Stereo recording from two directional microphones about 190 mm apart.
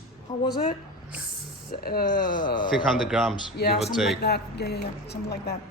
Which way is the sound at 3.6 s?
60° left (ahead or behind).